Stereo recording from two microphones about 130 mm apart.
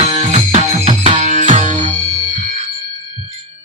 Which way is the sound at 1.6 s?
40° left (ahead or behind).